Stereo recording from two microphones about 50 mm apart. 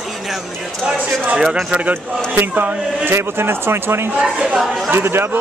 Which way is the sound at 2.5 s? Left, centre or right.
Right.